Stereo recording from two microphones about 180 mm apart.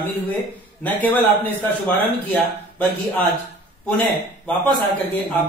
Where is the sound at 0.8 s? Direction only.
10° left (ahead or behind).